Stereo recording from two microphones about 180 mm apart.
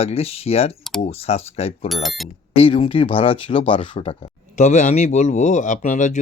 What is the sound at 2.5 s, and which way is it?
Speech, 30° left (ahead or behind).